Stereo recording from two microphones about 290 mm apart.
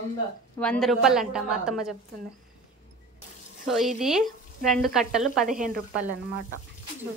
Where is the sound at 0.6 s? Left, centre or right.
Centre.